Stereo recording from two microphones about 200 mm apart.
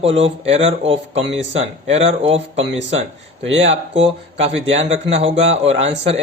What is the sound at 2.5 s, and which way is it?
Speech, 70° right (ahead or behind).